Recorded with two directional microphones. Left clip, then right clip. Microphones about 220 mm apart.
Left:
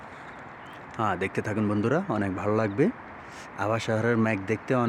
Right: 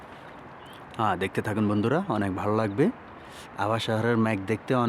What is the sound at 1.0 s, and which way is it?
Speech, 20° right (ahead or behind).